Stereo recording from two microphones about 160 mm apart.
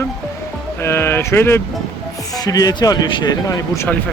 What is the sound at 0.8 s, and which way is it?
Speech, 15° left (ahead or behind).